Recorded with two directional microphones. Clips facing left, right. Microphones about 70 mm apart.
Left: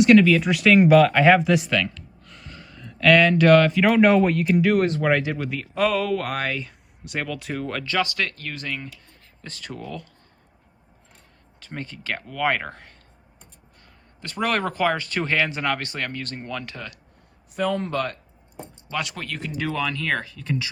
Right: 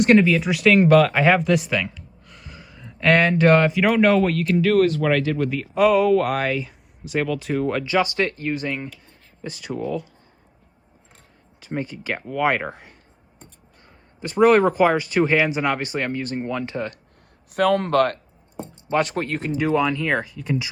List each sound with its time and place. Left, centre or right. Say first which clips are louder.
0.3 s speech: even; centre
1.7 s speech: even; centre
2.2 s a sound: even; centre
3.0 s speech: left 1 dB; right
3.7 s speech: even; centre
5.4 s speech: right 5 dB; centre
7.9 s speech: right 4 dB; right
11.6 s speech: right 6 dB; centre
17.5 s speech: right 6 dB; right
18.9 s speech: right 8 dB; right
19.5 s speech: right 6 dB; centre